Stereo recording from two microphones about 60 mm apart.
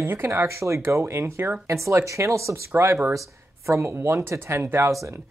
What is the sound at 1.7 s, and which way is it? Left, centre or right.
Speech, right.